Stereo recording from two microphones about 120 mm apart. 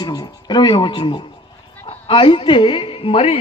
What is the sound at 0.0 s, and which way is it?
A woman's voice, 35° left (ahead or behind).